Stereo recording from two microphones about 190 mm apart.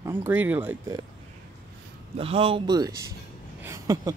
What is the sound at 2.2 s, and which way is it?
Speech, 30° right (ahead or behind).